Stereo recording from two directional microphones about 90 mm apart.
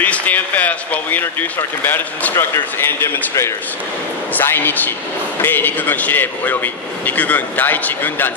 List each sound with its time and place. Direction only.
0.0 s a man's voice: 20° left (ahead or behind)